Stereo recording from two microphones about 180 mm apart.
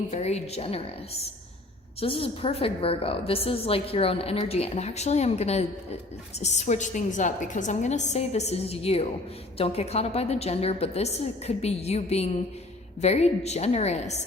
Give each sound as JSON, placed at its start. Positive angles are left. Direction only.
{"t": 0.1, "sound": "a woman's voice", "side_deg": 35}